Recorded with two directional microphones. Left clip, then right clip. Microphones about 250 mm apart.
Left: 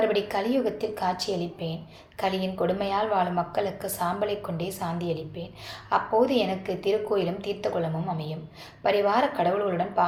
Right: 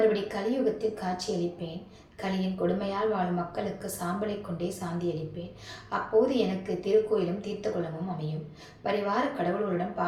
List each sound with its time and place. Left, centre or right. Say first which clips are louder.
0.1 s a woman's voice: left 4 dB; left
2.2 s a woman's voice: left 4 dB; left
8.8 s a woman's voice: left 6 dB; left